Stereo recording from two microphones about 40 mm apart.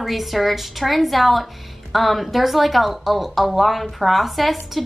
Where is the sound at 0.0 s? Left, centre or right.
Centre.